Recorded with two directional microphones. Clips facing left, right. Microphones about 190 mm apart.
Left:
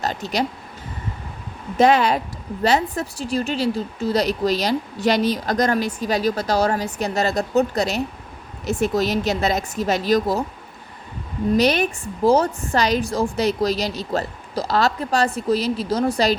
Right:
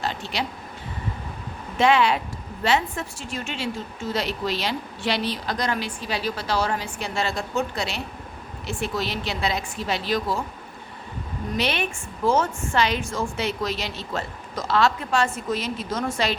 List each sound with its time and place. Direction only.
0.0 s a woman's voice: 40° left (ahead or behind)
1.8 s a woman's voice: 40° left (ahead or behind)
11.5 s a woman's voice: 40° left (ahead or behind)